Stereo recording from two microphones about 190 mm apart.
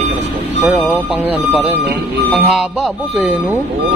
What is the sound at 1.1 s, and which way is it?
Speech, 10° right (ahead or behind).